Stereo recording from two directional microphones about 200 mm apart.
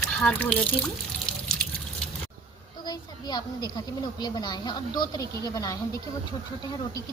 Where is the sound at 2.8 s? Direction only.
20° left (ahead or behind).